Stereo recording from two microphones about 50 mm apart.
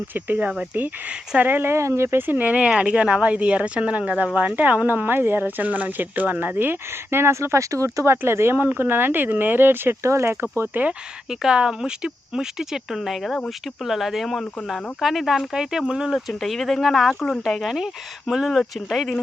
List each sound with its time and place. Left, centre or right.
0.1 s speech: right
1.6 s speech: right
2.2 s speech: right
4.9 s speech: right
8.2 s speech: right
10.0 s speech: right
10.7 s speech: right
11.3 s speech: centre
13.0 s speech: centre
16.1 s speech: centre
17.4 s speech: centre